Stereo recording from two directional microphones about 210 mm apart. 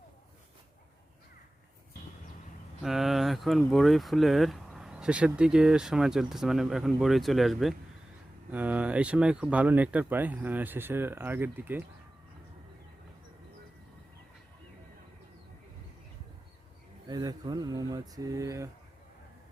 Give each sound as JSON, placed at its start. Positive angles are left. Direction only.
{"t": 2.8, "sound": "speech", "side_deg": 0}
{"t": 17.1, "sound": "speech", "side_deg": -20}